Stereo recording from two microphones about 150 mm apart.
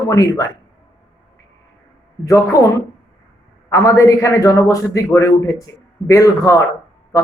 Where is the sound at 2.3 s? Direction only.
20° left (ahead or behind).